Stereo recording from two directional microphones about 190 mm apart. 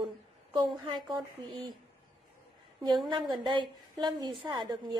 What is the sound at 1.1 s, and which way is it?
Speech, 25° right (ahead or behind).